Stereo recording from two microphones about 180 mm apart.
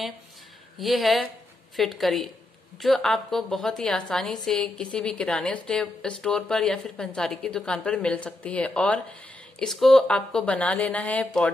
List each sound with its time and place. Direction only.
0.7 s speech: centre (ahead or behind)